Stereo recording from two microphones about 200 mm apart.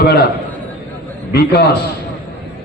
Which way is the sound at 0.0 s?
50° left (ahead or behind).